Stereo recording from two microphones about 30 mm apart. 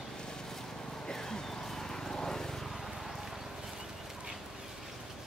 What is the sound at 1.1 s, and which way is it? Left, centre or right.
Vehicle, centre.